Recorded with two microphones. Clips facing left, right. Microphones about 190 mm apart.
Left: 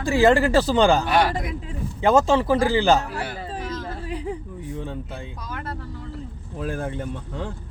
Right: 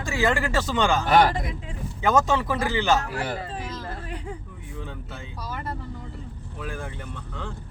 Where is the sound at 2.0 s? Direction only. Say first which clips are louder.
Left 4 dB; 30° left (ahead or behind).